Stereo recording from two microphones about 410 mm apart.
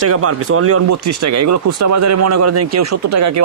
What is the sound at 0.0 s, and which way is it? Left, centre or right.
Speech, right.